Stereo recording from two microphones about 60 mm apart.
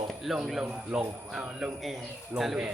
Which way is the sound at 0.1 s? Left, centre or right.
Centre.